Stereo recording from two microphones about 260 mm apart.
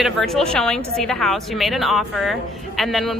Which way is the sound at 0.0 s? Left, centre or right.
Centre.